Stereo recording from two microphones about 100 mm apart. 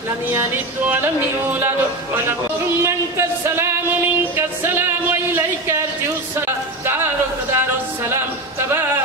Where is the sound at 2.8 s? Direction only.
25° right (ahead or behind).